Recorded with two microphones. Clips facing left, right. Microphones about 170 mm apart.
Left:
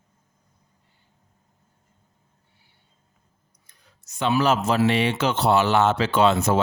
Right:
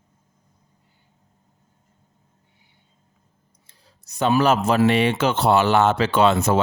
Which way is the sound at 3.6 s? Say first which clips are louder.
Right 2 dB; 35° right (ahead or behind).